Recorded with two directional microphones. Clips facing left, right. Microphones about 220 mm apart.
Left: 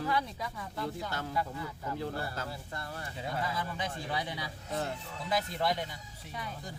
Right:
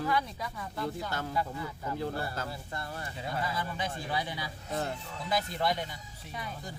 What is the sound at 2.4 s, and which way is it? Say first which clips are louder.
Speech: right 2 dB; 45° right (ahead or behind).